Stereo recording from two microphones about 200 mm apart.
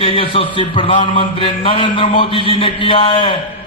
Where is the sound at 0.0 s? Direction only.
25° left (ahead or behind).